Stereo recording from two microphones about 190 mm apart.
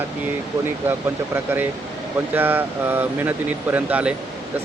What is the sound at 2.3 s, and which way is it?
Speech, 10° right (ahead or behind).